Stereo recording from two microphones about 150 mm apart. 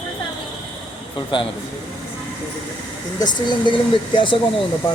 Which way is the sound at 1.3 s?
35° left (ahead or behind).